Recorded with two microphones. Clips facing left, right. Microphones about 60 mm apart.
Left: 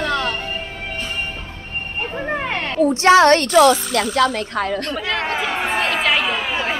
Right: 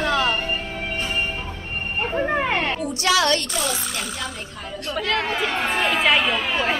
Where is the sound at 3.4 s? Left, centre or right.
Left.